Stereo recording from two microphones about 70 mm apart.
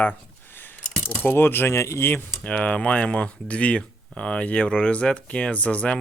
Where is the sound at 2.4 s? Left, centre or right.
Centre.